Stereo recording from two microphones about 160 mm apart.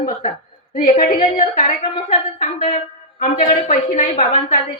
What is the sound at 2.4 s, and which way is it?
Speech, 55° left (ahead or behind).